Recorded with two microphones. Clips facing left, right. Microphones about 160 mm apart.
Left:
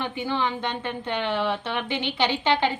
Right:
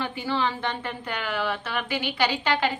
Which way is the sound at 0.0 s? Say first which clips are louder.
Even; 20° left (ahead or behind).